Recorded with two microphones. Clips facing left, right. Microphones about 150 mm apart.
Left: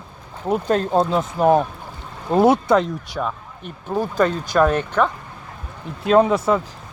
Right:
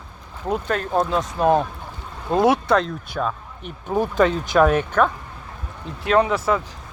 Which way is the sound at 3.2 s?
5° left (ahead or behind).